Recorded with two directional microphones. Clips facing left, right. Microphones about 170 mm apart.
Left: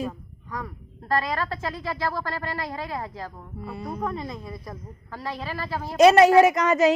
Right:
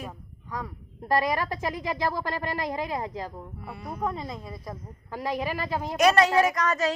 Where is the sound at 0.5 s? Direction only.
15° right (ahead or behind).